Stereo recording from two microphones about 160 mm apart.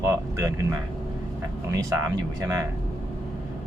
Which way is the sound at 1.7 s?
20° right (ahead or behind).